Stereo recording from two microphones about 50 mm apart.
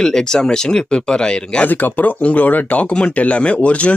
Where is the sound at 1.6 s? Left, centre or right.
Left.